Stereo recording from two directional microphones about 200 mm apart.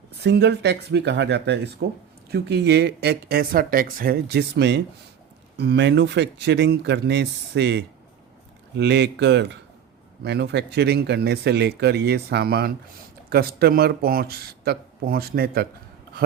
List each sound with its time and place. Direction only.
0.2 s speech: 55° right (ahead or behind)